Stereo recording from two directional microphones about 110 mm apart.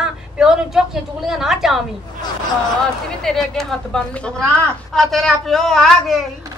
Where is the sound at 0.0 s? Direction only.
5° right (ahead or behind).